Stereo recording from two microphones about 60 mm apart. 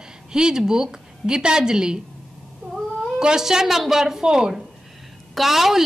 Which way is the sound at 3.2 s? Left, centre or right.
Centre.